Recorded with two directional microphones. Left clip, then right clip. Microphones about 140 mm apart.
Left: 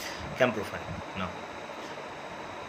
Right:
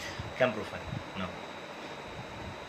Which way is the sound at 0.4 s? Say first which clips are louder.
Left 2 dB; 25° left (ahead or behind).